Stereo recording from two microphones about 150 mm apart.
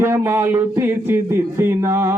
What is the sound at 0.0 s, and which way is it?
Music, 15° right (ahead or behind).